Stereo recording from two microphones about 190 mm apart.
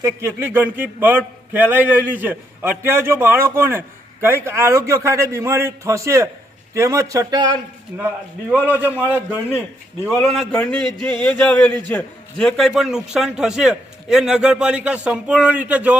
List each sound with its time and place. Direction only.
0.0 s a man's voice: 10° right (ahead or behind)
8.6 s a man's voice: 10° right (ahead or behind)
10.2 s a man's voice: centre (ahead or behind)
10.6 s a sound: 5° left (ahead or behind)
11.9 s a man's voice: 5° left (ahead or behind)